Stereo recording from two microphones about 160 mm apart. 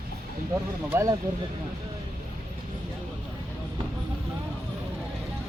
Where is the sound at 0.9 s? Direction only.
20° right (ahead or behind).